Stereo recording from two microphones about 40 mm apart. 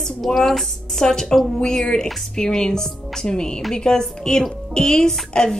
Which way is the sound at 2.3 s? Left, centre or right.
Centre.